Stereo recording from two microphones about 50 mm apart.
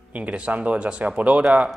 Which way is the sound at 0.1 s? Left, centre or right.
Right.